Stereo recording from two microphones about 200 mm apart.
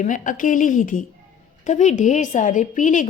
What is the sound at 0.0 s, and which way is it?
A woman's voice, 40° left (ahead or behind).